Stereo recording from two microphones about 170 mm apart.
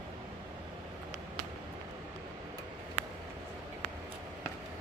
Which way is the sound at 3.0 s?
40° right (ahead or behind).